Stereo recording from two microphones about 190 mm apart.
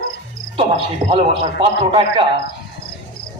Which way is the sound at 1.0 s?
30° right (ahead or behind).